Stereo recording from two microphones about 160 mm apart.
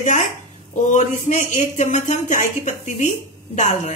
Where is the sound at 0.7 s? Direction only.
50° left (ahead or behind).